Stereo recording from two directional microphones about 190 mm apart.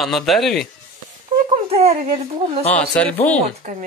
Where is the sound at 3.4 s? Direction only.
40° right (ahead or behind).